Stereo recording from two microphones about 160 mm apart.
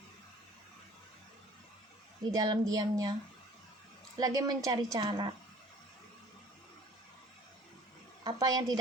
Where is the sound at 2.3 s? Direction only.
25° right (ahead or behind).